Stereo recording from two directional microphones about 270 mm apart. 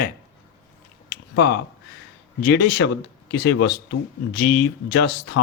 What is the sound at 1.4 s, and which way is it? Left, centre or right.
Mantra, left.